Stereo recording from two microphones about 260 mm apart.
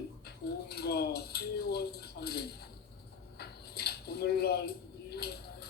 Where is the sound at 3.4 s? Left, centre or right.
Left.